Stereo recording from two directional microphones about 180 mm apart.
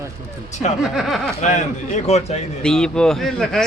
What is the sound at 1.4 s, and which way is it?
A man's voice, 40° left (ahead or behind).